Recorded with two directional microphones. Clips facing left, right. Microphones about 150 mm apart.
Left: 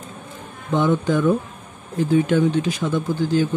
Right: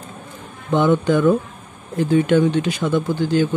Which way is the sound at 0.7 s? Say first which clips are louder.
Right 3 dB; 70° right (ahead or behind).